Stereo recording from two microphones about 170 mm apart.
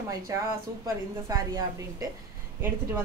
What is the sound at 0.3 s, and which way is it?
A woman's voice, 20° right (ahead or behind).